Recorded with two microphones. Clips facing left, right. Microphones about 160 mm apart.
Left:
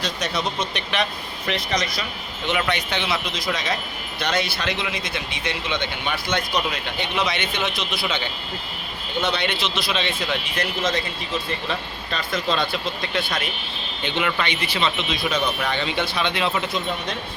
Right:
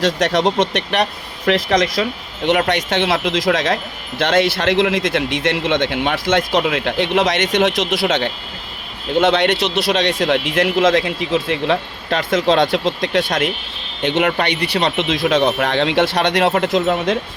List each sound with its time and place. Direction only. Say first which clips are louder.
0.0 s speech: right 10 dB; 90° right
0.6 s speech: right 8 dB; 75° right (ahead or behind)
1.5 s speech: right 10 dB; 90° right
14.0 s speech: right 9 dB; 75° right (ahead or behind)
14.3 s speech: right 6 dB; 65° right (ahead or behind); by 17.2 s 85° right